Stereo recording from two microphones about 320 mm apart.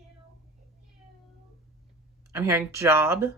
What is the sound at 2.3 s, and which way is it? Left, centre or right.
Speech, centre.